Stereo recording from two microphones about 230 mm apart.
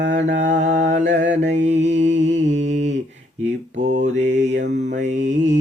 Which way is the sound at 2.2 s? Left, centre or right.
Right.